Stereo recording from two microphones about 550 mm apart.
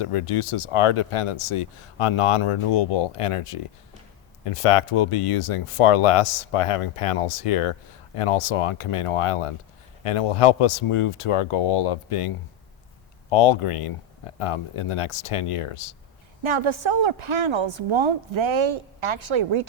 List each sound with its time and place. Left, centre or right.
0.0 s speech: left
16.4 s a woman's voice: right